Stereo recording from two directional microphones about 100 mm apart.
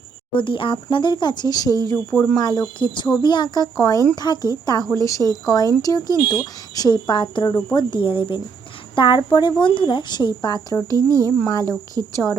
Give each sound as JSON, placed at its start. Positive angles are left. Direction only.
{"t": 0.3, "sound": "speech", "side_deg": 55}
{"t": 2.4, "sound": "speech", "side_deg": 45}